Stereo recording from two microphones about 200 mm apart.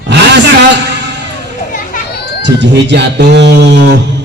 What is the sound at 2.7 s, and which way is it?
A man's voice, 60° right (ahead or behind).